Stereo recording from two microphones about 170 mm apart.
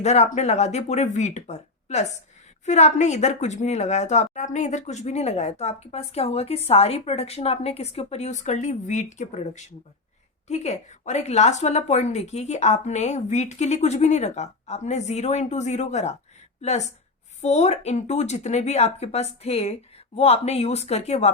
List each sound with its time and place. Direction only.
0.0 s a woman's voice: 40° left (ahead or behind)
10.5 s a woman's voice: 40° left (ahead or behind)